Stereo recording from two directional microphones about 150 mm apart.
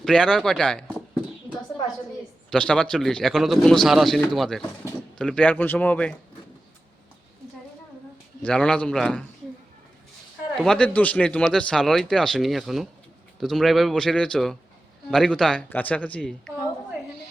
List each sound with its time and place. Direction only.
0.0 s speech: 5° left (ahead or behind)
2.5 s a man's voice: 5° left (ahead or behind)
8.4 s a man's voice: 5° left (ahead or behind)
10.6 s a man's voice: 5° left (ahead or behind)